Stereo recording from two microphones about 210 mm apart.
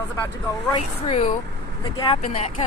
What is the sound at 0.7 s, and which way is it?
Speech, 30° left (ahead or behind).